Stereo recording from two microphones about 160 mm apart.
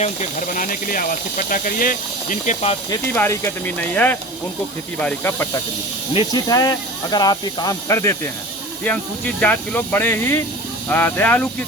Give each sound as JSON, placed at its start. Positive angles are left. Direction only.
{"t": 0.0, "sound": "speech", "side_deg": 50}
{"t": 3.1, "sound": "speech", "side_deg": 15}
{"t": 9.4, "sound": "speech", "side_deg": 10}